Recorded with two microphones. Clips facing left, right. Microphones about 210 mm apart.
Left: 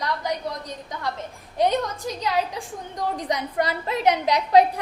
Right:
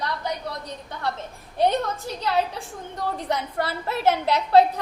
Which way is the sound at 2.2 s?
15° left (ahead or behind).